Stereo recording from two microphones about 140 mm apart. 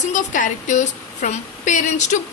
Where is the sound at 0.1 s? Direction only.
60° left (ahead or behind).